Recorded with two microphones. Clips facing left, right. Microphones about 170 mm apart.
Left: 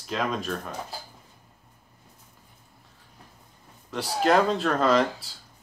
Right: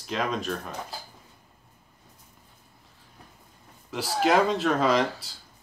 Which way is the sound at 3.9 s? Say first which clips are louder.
Left 1 dB; centre (ahead or behind).